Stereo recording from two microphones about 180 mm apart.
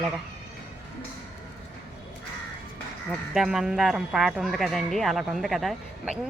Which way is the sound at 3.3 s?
Centre (ahead or behind).